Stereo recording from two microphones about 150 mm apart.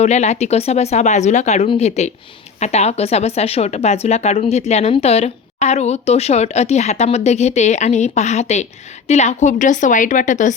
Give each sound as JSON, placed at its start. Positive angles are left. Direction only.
{"t": 0.0, "sound": "speech", "side_deg": 50}